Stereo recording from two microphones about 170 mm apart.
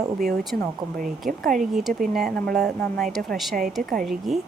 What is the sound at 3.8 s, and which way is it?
Speech, 55° right (ahead or behind).